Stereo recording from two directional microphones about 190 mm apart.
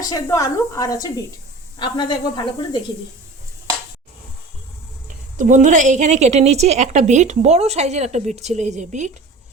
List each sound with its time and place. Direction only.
0.0 s a woman's voice: 15° left (ahead or behind)
5.4 s a woman's voice: 40° right (ahead or behind)